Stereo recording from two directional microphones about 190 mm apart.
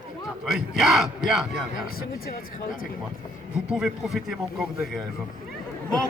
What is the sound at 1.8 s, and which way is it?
Speech, 50° left (ahead or behind).